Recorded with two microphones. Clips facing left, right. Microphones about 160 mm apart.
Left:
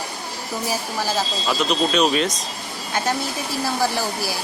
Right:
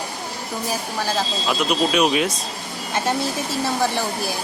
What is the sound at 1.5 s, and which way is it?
Speech, 10° right (ahead or behind).